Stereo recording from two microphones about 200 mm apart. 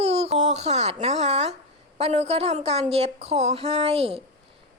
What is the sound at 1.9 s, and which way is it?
A woman's voice, 30° right (ahead or behind).